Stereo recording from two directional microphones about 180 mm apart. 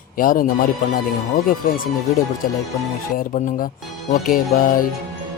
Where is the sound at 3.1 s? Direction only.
50° left (ahead or behind).